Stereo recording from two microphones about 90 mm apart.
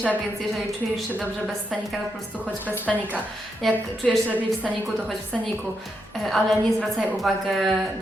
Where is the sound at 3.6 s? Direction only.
5° left (ahead or behind).